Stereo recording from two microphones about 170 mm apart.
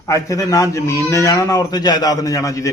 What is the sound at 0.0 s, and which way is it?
A man's voice, 20° left (ahead or behind).